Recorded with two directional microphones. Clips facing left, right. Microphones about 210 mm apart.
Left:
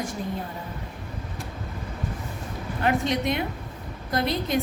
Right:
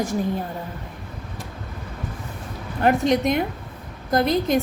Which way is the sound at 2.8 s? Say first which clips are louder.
Right 6 dB; 45° right (ahead or behind).